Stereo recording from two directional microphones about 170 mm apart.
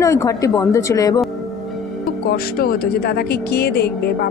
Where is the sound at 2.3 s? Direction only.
60° left (ahead or behind).